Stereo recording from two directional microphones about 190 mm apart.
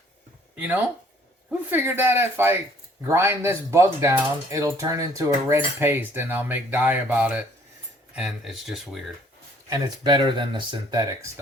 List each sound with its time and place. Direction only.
0.5 s speech: 10° right (ahead or behind)
1.7 s cutlery: 10° right (ahead or behind)
8.1 s speech: 5° right (ahead or behind)
9.6 s speech: 20° right (ahead or behind)